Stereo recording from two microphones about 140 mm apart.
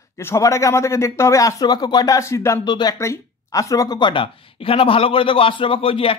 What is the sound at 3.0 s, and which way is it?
Speech, 20° left (ahead or behind).